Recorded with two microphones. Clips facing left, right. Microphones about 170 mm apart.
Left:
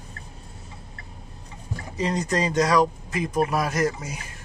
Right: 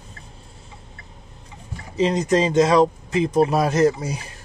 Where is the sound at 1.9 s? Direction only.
20° right (ahead or behind).